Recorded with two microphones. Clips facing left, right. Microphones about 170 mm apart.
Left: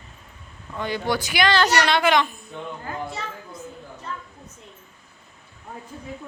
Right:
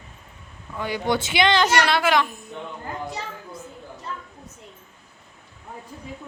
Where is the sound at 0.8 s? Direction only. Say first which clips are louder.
Right 1 dB; 10° right (ahead or behind).